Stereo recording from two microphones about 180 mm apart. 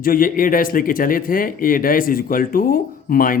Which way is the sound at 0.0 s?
50° left (ahead or behind).